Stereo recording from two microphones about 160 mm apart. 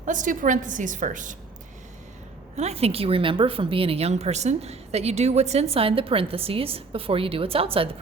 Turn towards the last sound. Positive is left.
turn(degrees=-35)  # may be behind; listen again after turning